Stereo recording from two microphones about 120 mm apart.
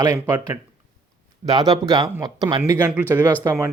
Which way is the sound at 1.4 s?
35° right (ahead or behind).